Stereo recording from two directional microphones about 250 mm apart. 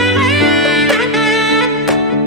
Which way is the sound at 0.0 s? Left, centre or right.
Centre.